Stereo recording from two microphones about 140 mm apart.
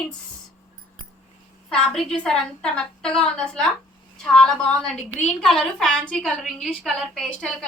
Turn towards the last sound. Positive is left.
turn(degrees=5)  # may be behind; listen again after turning